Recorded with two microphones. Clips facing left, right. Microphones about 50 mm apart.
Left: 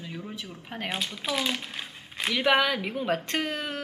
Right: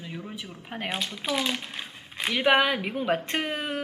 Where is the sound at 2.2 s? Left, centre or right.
Centre.